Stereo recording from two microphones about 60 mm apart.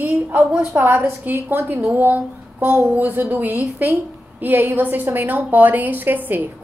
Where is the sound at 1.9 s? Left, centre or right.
Right.